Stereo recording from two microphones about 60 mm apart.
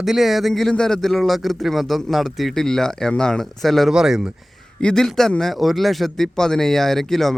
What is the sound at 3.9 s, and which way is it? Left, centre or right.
Speech, centre.